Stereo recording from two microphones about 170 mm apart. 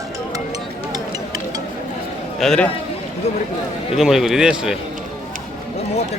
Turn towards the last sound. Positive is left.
turn(degrees=-5)  # may be behind; listen again after turning